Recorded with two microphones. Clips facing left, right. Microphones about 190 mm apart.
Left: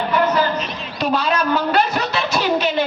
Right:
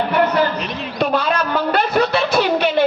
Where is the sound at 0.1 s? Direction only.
60° right (ahead or behind).